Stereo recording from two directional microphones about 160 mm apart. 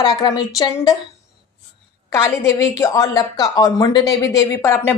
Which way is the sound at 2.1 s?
20° left (ahead or behind).